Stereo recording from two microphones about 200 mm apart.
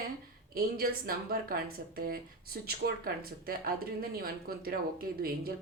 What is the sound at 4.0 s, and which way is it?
Speech, 50° right (ahead or behind).